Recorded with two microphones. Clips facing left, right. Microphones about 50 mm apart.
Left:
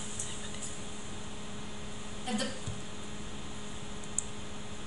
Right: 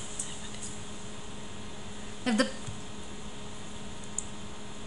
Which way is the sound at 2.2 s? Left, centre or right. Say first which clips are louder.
Right 8 dB; right.